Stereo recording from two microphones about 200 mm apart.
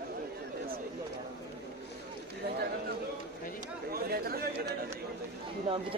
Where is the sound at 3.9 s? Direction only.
50° right (ahead or behind).